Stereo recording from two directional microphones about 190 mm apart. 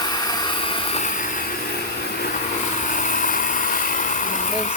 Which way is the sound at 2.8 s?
45° left (ahead or behind).